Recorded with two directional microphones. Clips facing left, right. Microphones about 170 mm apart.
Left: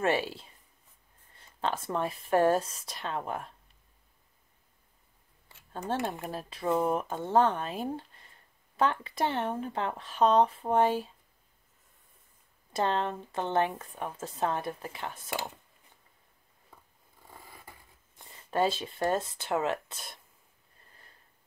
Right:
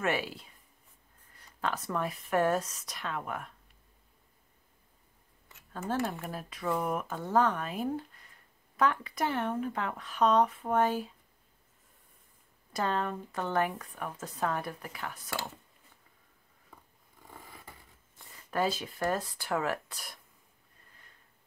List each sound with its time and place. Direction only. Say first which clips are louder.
0.0 s speech: left 3 dB; 30° left (ahead or behind)
5.5 s a sound: even; 30° left (ahead or behind)
5.9 s speech: even; 20° left (ahead or behind)
12.7 s speech: left 2 dB; 25° left (ahead or behind)
17.3 s zipper: right 1 dB; 15° left (ahead or behind)